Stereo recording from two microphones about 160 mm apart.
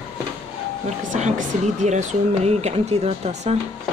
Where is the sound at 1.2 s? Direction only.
50° right (ahead or behind).